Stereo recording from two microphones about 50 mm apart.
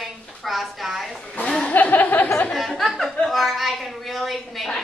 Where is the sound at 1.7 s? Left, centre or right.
Left.